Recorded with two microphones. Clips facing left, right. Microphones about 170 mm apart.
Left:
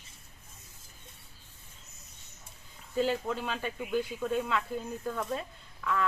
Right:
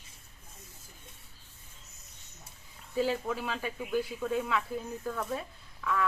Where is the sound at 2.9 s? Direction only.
5° right (ahead or behind).